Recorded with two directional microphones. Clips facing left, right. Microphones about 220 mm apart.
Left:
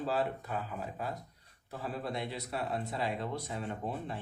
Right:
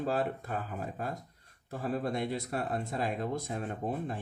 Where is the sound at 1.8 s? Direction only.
45° right (ahead or behind).